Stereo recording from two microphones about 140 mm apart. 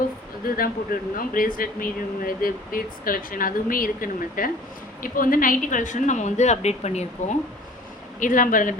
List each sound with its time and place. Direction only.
0.4 s speech: 90° left; by 7.3 s 50° left (ahead or behind)
8.2 s speech: 70° left (ahead or behind)